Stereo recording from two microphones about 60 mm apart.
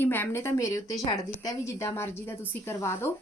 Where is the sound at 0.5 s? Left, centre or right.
Left.